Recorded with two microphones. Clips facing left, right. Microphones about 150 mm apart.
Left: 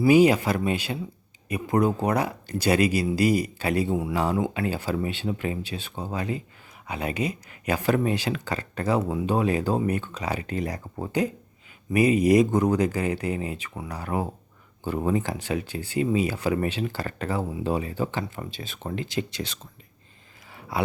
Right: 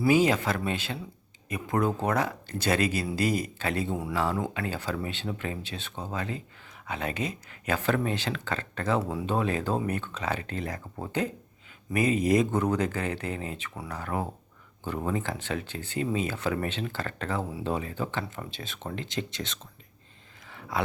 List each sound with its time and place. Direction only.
0.1 s speech: 15° left (ahead or behind)
18.5 s speech: centre (ahead or behind)
20.5 s a sound: 10° left (ahead or behind)